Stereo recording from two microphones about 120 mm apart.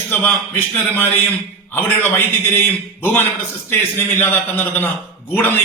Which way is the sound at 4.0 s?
20° left (ahead or behind).